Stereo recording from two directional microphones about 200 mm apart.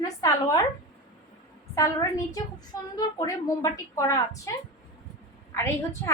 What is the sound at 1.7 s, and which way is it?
A woman's voice, 15° left (ahead or behind).